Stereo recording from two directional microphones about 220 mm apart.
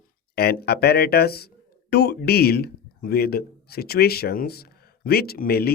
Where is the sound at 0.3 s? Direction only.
45° left (ahead or behind).